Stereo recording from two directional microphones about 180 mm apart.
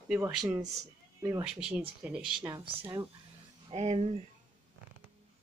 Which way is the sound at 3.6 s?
35° right (ahead or behind).